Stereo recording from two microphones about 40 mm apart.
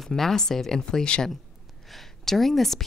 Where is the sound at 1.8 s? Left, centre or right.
Centre.